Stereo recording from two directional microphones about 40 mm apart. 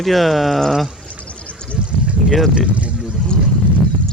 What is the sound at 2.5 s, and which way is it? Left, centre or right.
Speech, right.